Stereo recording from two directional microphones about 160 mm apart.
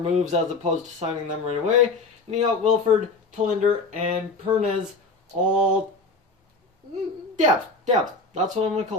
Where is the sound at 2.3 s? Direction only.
50° right (ahead or behind).